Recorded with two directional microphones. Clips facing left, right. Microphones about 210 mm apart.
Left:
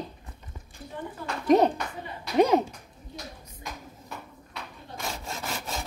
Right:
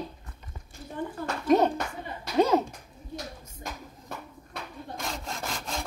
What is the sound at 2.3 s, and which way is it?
Speech, 15° left (ahead or behind).